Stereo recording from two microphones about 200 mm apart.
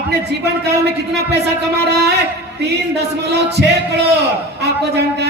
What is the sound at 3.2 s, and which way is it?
Speech, 55° right (ahead or behind).